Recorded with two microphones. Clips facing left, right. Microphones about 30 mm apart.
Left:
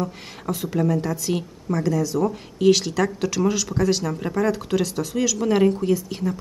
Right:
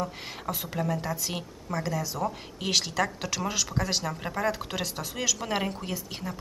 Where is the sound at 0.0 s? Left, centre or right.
Centre.